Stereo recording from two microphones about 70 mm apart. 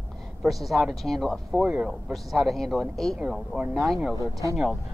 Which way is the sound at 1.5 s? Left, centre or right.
Centre.